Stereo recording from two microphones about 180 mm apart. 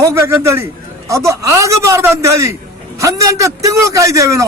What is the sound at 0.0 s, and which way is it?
A man's voice, 15° right (ahead or behind).